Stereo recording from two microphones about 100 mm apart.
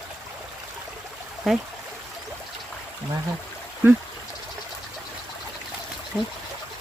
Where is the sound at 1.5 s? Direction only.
Centre (ahead or behind).